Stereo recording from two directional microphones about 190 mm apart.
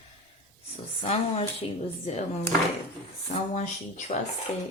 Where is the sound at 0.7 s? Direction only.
30° left (ahead or behind).